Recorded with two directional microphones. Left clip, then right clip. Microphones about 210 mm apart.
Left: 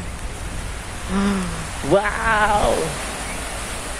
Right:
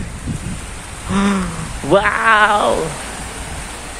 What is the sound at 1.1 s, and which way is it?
Speech, 30° right (ahead or behind).